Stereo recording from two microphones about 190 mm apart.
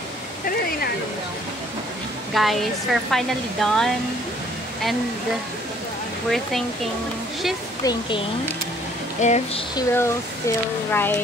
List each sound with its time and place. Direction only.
2.3 s a woman's voice: centre (ahead or behind)
7.8 s speech: 25° left (ahead or behind)
9.2 s a sound: 40° left (ahead or behind)
9.8 s speech: 15° left (ahead or behind)